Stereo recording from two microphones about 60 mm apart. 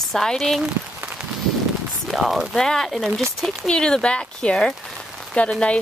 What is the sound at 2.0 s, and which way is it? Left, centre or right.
Speech, centre.